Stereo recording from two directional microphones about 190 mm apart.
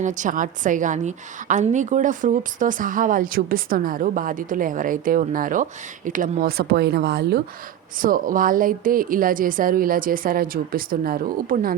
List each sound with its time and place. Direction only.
0.0 s a woman's voice: 40° right (ahead or behind); by 7.4 s 55° right (ahead or behind)
7.9 s a woman's voice: 45° right (ahead or behind)